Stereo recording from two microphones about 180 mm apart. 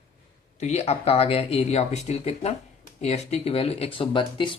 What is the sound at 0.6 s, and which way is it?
Speech, 35° left (ahead or behind).